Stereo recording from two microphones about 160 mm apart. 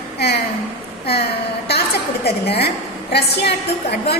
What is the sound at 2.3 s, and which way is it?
A woman's voice, 90° left.